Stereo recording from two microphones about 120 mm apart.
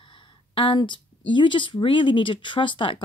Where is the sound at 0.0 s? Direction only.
45° left (ahead or behind).